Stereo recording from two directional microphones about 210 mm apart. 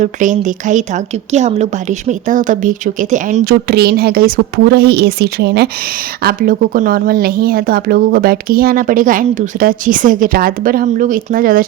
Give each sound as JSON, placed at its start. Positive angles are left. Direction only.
{"t": 0.0, "sound": "a woman's voice", "side_deg": -35}